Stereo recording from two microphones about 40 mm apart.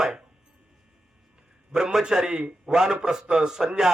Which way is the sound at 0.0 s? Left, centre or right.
Centre.